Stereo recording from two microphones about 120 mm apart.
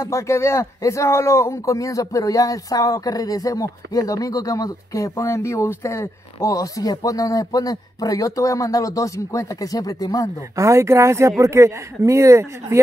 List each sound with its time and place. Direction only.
0.0 s speech: 25° left (ahead or behind)
10.5 s speech: 25° right (ahead or behind)